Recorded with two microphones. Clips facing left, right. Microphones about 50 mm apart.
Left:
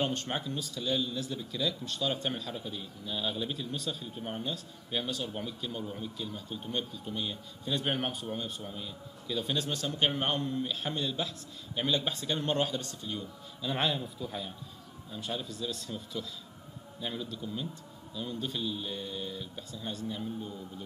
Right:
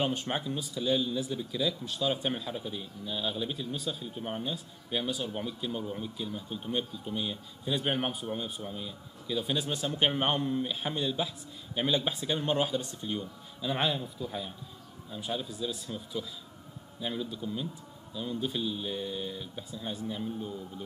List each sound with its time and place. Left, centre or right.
0.0 s speech: centre
13.0 s speech: right
13.6 s a man's voice: centre